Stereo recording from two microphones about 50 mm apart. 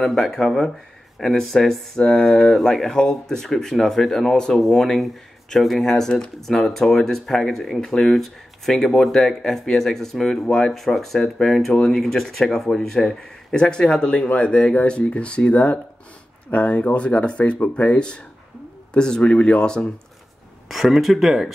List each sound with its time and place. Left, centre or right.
0.0 s speech: centre
20.6 s speech: centre